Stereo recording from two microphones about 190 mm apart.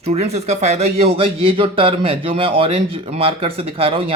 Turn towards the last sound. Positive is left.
turn(degrees=-30)  # may be behind; listen again after turning